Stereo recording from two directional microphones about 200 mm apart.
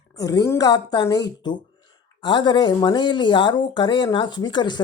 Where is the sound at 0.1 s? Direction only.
20° left (ahead or behind).